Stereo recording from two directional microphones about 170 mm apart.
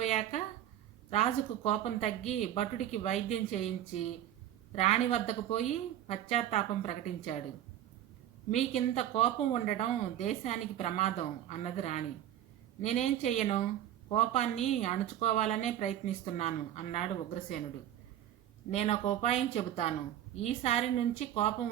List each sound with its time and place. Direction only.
0.0 s a sound: 40° left (ahead or behind)
1.1 s speech: 40° left (ahead or behind)
8.4 s speech: 40° left (ahead or behind)
18.7 s speech: 40° left (ahead or behind)